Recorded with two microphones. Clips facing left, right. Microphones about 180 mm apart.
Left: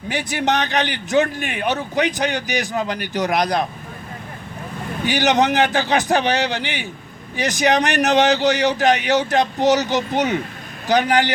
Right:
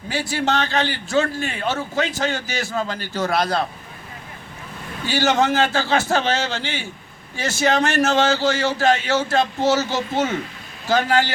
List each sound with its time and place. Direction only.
0.1 s a man's voice: 20° left (ahead or behind)
5.0 s a man's voice: 20° left (ahead or behind)